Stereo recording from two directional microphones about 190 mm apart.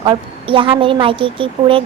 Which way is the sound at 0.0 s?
25° right (ahead or behind).